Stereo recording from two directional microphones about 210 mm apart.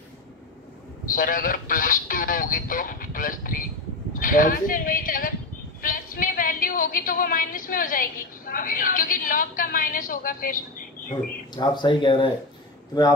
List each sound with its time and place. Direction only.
1.1 s a woman's voice: 40° left (ahead or behind)
11.5 s speech: 20° left (ahead or behind)